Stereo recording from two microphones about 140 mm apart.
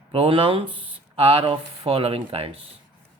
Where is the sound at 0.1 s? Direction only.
40° right (ahead or behind).